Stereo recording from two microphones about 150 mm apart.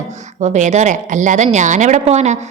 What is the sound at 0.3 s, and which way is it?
A woman's voice, 50° right (ahead or behind).